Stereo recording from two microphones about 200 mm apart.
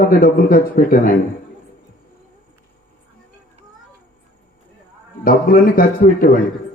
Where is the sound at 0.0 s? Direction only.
45° left (ahead or behind).